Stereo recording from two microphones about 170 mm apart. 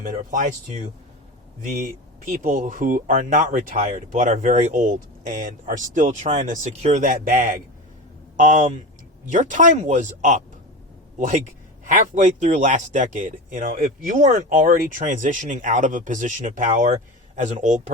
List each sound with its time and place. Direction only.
0.0 s speech: 50° right (ahead or behind)
2.2 s speech: 50° right (ahead or behind)
11.9 s speech: 45° right (ahead or behind)